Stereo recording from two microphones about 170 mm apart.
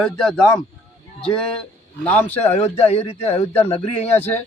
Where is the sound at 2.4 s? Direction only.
40° left (ahead or behind).